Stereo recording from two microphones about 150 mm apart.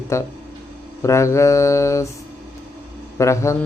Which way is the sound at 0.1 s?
20° left (ahead or behind).